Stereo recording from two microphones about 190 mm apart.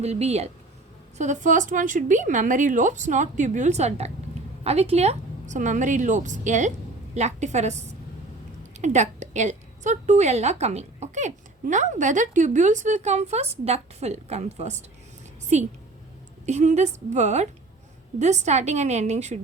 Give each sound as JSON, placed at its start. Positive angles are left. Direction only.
{"t": 0.0, "sound": "a woman's voice", "side_deg": -35}